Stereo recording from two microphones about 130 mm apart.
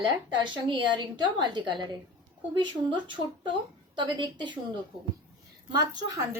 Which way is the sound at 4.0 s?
35° right (ahead or behind).